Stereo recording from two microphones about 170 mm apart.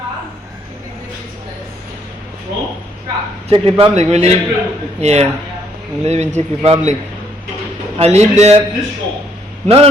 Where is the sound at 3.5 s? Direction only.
30° right (ahead or behind).